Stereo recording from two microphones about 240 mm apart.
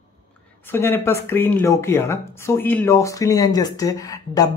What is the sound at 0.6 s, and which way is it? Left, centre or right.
Speech, centre.